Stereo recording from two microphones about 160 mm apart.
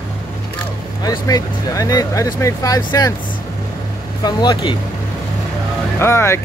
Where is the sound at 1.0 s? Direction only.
20° left (ahead or behind).